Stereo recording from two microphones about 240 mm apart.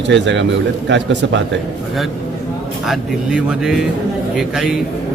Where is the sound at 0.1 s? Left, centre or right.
Right.